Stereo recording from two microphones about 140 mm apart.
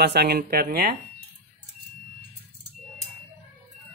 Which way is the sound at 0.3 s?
90° right.